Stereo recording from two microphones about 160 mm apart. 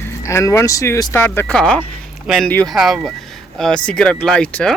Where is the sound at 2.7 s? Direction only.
Centre (ahead or behind).